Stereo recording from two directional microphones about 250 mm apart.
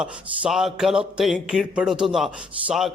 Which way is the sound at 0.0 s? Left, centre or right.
Centre.